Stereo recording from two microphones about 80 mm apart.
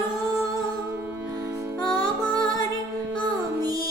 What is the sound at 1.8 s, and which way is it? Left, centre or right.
Music, right.